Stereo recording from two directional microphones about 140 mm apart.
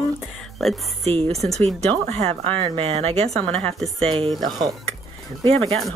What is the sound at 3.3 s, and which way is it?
Speech, 5° left (ahead or behind).